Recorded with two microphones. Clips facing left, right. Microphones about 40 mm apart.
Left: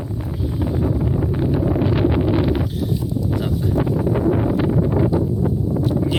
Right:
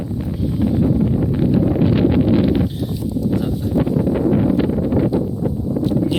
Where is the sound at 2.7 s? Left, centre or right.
Centre.